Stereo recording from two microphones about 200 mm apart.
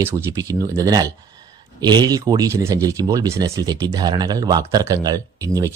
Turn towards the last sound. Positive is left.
turn(degrees=-15)  # may be behind; listen again after turning